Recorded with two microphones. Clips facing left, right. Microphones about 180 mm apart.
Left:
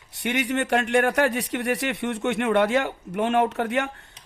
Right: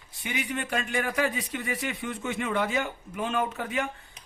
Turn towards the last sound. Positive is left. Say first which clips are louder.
# left 7 dB
turn(degrees=70)  # may be behind; listen again after turning